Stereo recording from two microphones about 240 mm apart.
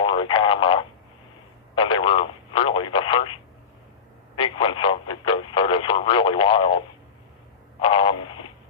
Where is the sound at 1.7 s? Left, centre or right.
Left.